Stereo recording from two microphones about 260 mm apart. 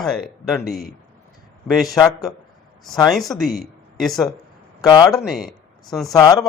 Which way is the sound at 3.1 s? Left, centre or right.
Centre.